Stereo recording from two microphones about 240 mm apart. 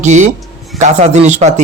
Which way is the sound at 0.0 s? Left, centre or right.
Right.